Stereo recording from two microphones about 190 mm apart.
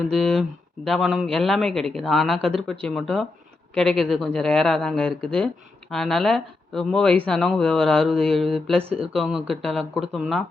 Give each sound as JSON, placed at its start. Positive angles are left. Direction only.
{"t": 0.1, "sound": "a man's voice", "side_deg": 0}